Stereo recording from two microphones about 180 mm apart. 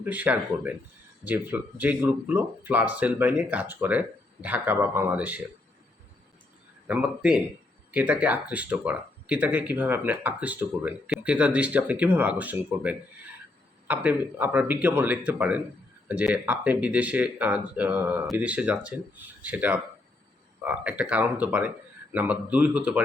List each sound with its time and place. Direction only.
0.0 s speech: 10° right (ahead or behind)
6.8 s speech: 5° right (ahead or behind)